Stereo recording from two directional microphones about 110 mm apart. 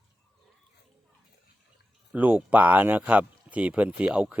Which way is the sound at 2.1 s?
15° right (ahead or behind).